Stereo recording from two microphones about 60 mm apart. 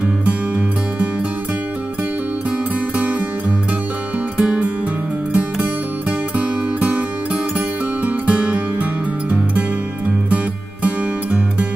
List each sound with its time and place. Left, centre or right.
0.0 s music: right
3.0 s music: right